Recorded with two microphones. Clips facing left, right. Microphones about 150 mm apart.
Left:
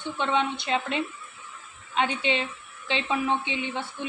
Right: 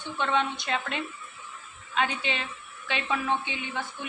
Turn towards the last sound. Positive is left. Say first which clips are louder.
# left 3 dB
turn(degrees=25)  # may be behind; listen again after turning